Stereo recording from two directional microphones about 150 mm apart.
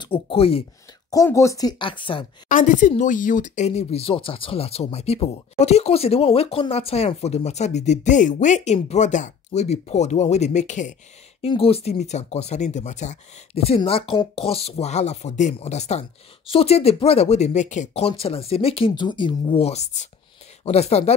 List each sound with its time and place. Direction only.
0.0 s speech: 35° left (ahead or behind)
1.1 s speech: 20° left (ahead or behind)
2.4 s a woman's voice: 60° left (ahead or behind)
11.4 s speech: 40° left (ahead or behind)